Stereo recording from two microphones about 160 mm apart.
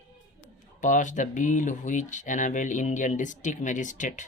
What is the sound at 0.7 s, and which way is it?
Speech, 50° left (ahead or behind).